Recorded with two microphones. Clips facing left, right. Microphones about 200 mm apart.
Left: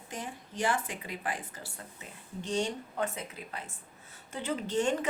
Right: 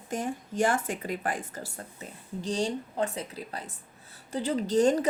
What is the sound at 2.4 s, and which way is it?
Speech, 35° right (ahead or behind).